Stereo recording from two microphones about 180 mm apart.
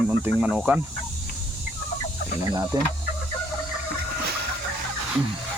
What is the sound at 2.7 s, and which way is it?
Speech, 20° right (ahead or behind).